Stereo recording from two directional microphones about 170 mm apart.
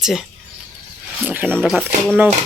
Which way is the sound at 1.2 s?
10° right (ahead or behind).